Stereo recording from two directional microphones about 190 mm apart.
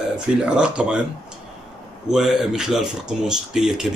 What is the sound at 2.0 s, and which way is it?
Speech, centre (ahead or behind).